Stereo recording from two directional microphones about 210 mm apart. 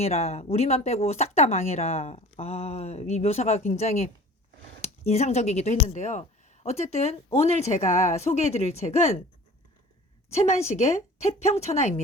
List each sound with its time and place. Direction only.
0.0 s speech: 30° left (ahead or behind)
10.3 s speech: 30° left (ahead or behind)